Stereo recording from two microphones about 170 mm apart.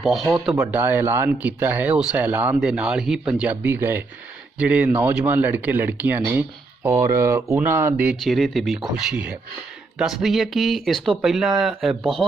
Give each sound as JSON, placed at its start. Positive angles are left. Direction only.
{"t": 0.0, "sound": "speech", "side_deg": 0}
{"t": 0.7, "sound": "speech", "side_deg": -10}
{"t": 8.2, "sound": "speech", "side_deg": 0}